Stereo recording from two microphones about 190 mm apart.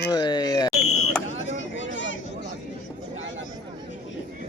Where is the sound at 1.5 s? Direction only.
75° left (ahead or behind).